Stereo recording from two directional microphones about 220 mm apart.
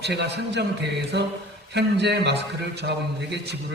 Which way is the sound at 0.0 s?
50° right (ahead or behind).